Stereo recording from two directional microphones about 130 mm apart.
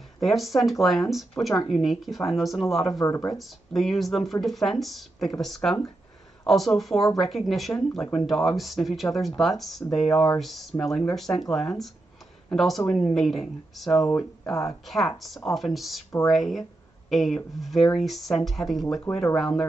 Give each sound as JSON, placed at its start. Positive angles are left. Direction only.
{"t": 0.2, "sound": "speech", "side_deg": 0}
{"t": 2.9, "sound": "speech", "side_deg": 25}
{"t": 3.3, "sound": "speech", "side_deg": 0}
{"t": 14.5, "sound": "speech", "side_deg": 25}
{"t": 14.9, "sound": "speech", "side_deg": 0}